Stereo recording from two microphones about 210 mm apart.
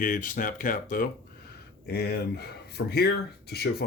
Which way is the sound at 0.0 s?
40° left (ahead or behind).